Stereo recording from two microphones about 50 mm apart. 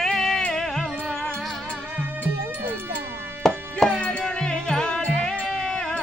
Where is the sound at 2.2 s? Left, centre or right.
Right.